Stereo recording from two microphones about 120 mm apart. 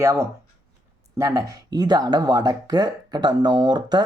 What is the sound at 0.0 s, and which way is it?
Speech, 25° right (ahead or behind).